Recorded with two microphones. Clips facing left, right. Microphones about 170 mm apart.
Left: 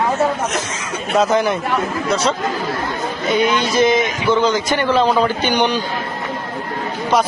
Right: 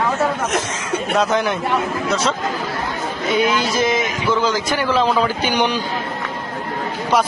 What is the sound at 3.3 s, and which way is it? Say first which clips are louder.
Speech: left 2 dB; centre (ahead or behind).